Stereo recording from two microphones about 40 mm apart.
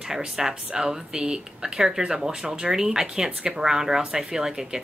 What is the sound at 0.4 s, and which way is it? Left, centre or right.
Speech, centre.